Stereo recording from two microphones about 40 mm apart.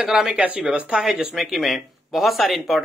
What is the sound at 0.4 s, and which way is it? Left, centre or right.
Speech, right.